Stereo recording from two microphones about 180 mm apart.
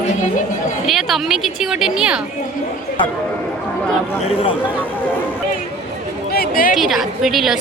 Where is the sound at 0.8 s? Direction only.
Centre (ahead or behind).